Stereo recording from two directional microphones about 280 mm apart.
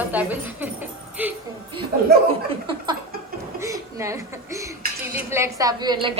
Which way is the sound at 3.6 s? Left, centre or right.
Centre.